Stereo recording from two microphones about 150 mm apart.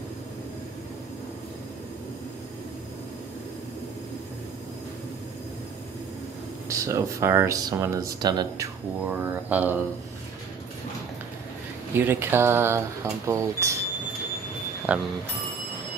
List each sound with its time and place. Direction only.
6.7 s speech: 20° right (ahead or behind)
9.0 s speech: 15° right (ahead or behind)
11.9 s speech: 15° right (ahead or behind)
14.9 s speech: 10° right (ahead or behind)